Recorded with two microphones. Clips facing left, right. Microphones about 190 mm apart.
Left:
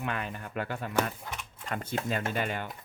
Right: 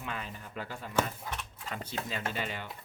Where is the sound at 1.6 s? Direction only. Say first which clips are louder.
Left 6 dB; 50° left (ahead or behind).